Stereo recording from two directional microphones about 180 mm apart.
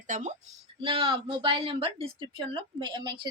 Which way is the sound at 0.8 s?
30° right (ahead or behind).